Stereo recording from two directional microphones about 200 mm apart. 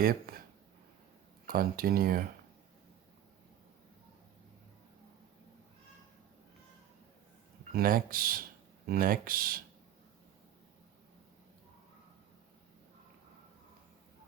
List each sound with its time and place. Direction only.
0.0 s speech: 45° right (ahead or behind)
1.5 s speech: 45° right (ahead or behind)
7.7 s speech: 45° right (ahead or behind)